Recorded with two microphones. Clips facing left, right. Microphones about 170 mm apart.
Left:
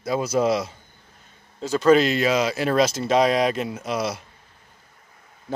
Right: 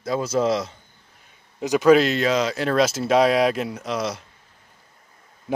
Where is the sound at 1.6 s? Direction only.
15° right (ahead or behind); by 4.2 s 5° left (ahead or behind).